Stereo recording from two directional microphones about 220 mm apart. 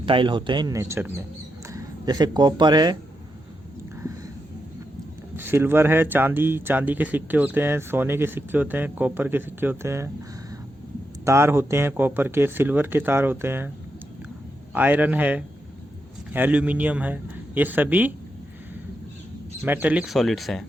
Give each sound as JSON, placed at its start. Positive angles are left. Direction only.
{"t": 0.0, "sound": "speech", "side_deg": -20}
{"t": 5.4, "sound": "speech", "side_deg": -10}
{"t": 11.3, "sound": "speech", "side_deg": -10}
{"t": 14.7, "sound": "speech", "side_deg": -10}
{"t": 19.6, "sound": "speech", "side_deg": -10}